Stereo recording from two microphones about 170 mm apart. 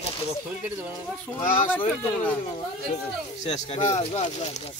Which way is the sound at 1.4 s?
50° left (ahead or behind).